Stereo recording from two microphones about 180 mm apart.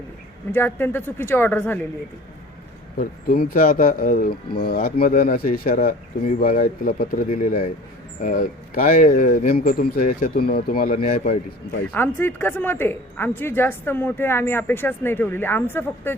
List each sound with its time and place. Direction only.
0.5 s a woman's voice: 10° left (ahead or behind)
3.0 s speech: 50° left (ahead or behind)
11.9 s a woman's voice: 10° left (ahead or behind)